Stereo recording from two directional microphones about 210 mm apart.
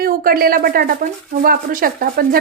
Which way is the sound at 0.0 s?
45° right (ahead or behind).